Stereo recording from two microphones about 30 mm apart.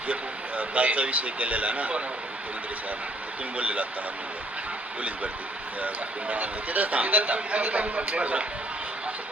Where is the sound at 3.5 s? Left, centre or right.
Right.